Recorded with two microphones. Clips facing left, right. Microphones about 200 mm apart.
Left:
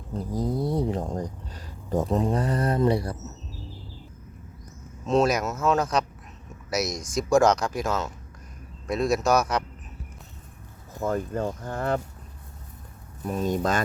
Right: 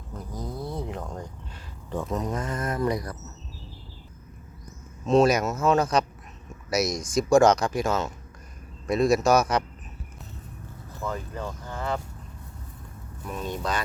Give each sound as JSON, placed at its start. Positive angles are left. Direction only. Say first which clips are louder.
{"t": 0.1, "sound": "speech", "louder": "left 8 dB", "side_deg": 30}
{"t": 5.0, "sound": "speech", "louder": "right 2 dB", "side_deg": 0}
{"t": 11.0, "sound": "speech", "louder": "left 6 dB", "side_deg": 50}
{"t": 13.2, "sound": "speech", "louder": "left 6 dB", "side_deg": 40}